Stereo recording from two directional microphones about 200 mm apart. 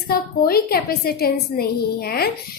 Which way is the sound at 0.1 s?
50° left (ahead or behind).